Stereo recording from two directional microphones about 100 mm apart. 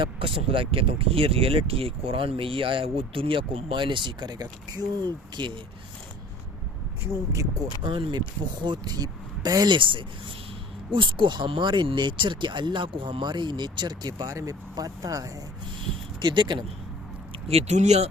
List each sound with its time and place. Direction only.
0.0 s speech: 60° right (ahead or behind)
7.9 s speech: 60° right (ahead or behind)
8.6 s speech: 45° right (ahead or behind)
9.7 s speech: 55° right (ahead or behind); by 15.3 s 35° right (ahead or behind)
16.2 s speech: 50° right (ahead or behind)
17.5 s speech: 90° right